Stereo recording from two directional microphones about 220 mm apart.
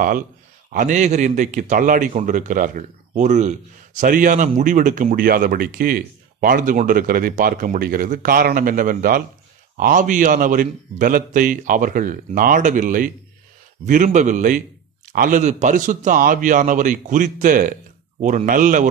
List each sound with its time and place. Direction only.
0.7 s a man's voice: 35° right (ahead or behind)